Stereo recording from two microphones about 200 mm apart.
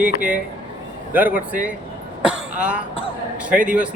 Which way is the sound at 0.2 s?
40° right (ahead or behind).